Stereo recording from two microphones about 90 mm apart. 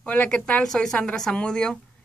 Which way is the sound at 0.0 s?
15° left (ahead or behind).